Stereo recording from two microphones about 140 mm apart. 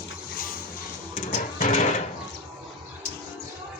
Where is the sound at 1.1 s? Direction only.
70° left (ahead or behind).